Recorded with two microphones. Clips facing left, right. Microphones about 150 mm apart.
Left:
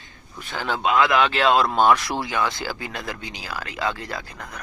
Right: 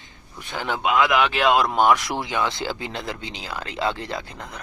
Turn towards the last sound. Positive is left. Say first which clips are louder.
# right 2 dB
turn(degrees=-25)  # may be behind; listen again after turning